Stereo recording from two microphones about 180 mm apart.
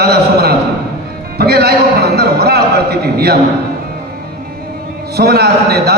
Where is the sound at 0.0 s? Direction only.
60° right (ahead or behind).